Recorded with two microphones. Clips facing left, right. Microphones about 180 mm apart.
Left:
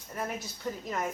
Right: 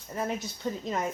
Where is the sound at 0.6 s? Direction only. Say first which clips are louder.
Right 3 dB; 20° right (ahead or behind).